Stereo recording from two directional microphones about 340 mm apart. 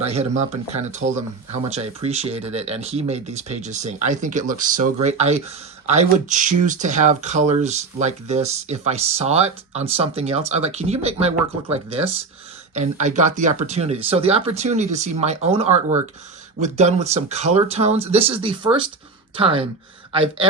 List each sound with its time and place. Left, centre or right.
0.0 s speech: centre